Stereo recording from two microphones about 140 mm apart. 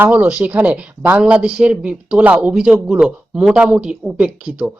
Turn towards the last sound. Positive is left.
turn(degrees=-5)  # may be behind; listen again after turning